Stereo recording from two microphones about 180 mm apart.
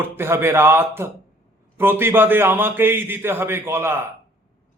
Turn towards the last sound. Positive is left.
turn(degrees=-15)  # may be behind; listen again after turning